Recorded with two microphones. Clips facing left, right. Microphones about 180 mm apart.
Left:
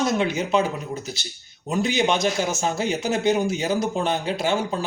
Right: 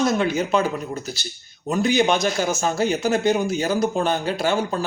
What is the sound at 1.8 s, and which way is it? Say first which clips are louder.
Speech: right 2 dB; 20° left (ahead or behind).